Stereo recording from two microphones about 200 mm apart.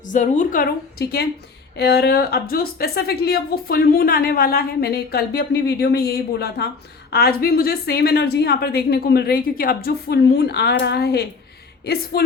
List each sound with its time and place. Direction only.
0.1 s a woman's voice: 40° left (ahead or behind)